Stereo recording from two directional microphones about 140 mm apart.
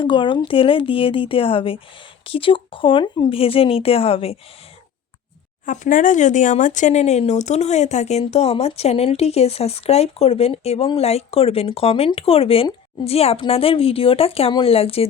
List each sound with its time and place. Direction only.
0.0 s speech: 35° left (ahead or behind)
5.6 s speech: 65° left (ahead or behind); by 15.0 s 45° left (ahead or behind)